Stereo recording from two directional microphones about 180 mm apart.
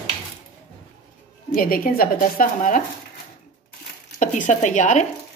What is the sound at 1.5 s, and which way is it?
A woman's voice, 55° left (ahead or behind).